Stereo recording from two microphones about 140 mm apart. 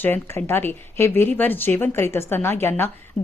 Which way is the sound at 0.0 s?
15° left (ahead or behind).